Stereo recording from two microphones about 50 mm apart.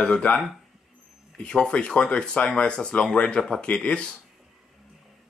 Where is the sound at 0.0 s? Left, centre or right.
Left.